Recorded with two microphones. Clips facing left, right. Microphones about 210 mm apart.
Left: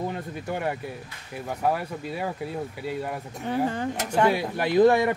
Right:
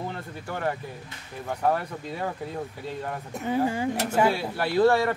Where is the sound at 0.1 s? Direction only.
15° left (ahead or behind).